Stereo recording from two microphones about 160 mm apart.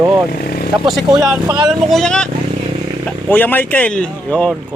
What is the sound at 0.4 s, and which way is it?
Speech, 65° left (ahead or behind).